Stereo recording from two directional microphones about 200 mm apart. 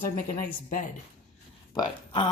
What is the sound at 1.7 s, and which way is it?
Speech, 20° left (ahead or behind).